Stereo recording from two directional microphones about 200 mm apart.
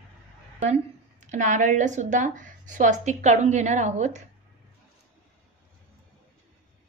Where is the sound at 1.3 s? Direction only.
40° right (ahead or behind).